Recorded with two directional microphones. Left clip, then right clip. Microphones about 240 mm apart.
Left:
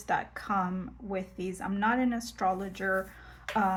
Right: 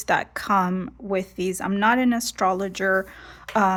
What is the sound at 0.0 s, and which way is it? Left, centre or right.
A woman's voice, right.